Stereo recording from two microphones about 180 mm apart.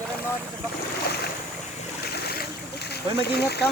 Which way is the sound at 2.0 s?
65° left (ahead or behind).